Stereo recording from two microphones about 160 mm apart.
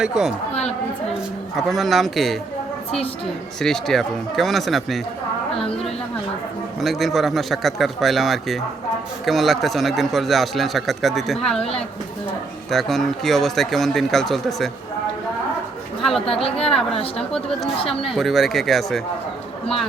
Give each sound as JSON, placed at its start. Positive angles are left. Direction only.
{"t": 0.0, "sound": "a man's voice", "side_deg": -5}
{"t": 1.5, "sound": "a man's voice", "side_deg": 0}
{"t": 3.6, "sound": "a man's voice", "side_deg": 0}
{"t": 6.8, "sound": "a man's voice", "side_deg": 0}
{"t": 12.7, "sound": "a man's voice", "side_deg": 0}
{"t": 16.2, "sound": "a woman's voice", "side_deg": 35}
{"t": 16.6, "sound": "a man's voice", "side_deg": 0}